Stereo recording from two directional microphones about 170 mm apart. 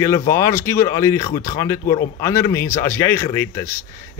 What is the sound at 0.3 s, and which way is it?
Speech, 15° left (ahead or behind).